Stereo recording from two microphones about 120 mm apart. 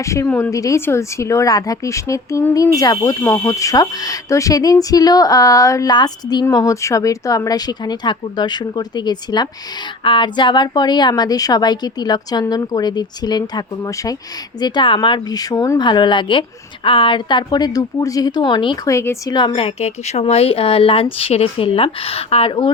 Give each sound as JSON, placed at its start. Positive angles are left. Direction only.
{"t": 0.0, "sound": "speech", "side_deg": 25}
{"t": 0.3, "sound": "speech", "side_deg": 15}
{"t": 0.5, "sound": "a woman's voice", "side_deg": 25}
{"t": 14.6, "sound": "a woman's voice", "side_deg": 40}
{"t": 15.9, "sound": "a woman's voice", "side_deg": 40}
{"t": 18.9, "sound": "speech", "side_deg": 25}
{"t": 19.3, "sound": "a woman's voice", "side_deg": 35}
{"t": 19.5, "sound": "speech", "side_deg": 60}